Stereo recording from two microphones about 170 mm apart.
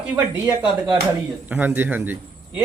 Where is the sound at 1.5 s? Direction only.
10° right (ahead or behind).